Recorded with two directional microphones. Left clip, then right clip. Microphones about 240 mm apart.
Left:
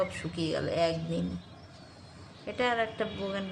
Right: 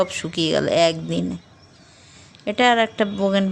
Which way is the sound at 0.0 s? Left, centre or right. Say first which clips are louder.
Right 11 dB; right.